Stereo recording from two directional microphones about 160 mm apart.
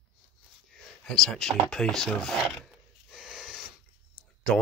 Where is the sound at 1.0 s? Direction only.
5° left (ahead or behind).